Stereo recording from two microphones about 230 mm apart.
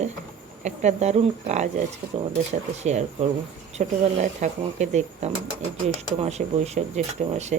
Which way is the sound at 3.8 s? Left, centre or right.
Right.